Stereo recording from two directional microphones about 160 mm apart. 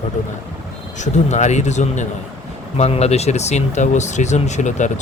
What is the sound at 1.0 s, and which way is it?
Speech, 45° left (ahead or behind).